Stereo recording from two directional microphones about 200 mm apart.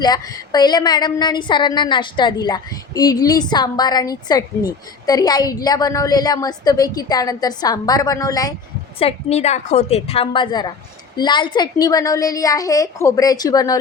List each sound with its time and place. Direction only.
0.0 s a woman's voice: 20° left (ahead or behind)
9.0 s a woman's voice: 30° left (ahead or behind)